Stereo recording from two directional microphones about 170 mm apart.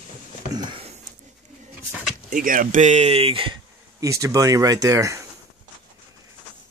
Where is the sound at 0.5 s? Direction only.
30° right (ahead or behind).